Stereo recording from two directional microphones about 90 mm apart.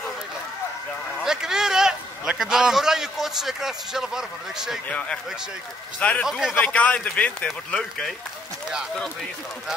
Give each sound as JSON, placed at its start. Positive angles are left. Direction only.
{"t": 1.2, "sound": "a man's voice", "side_deg": -5}
{"t": 4.8, "sound": "speech", "side_deg": 15}
{"t": 6.2, "sound": "speech", "side_deg": -5}
{"t": 6.5, "sound": "speech", "side_deg": 15}